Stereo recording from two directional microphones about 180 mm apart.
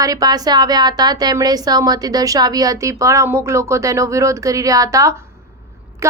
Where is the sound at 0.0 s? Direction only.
20° right (ahead or behind).